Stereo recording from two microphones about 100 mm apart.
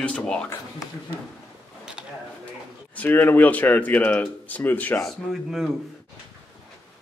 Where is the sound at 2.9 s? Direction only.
20° left (ahead or behind).